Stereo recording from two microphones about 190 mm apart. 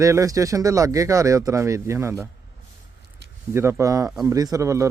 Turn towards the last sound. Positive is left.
turn(degrees=-15)  # may be behind; listen again after turning